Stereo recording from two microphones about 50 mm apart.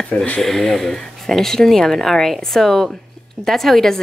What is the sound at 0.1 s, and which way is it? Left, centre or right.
Speech, left.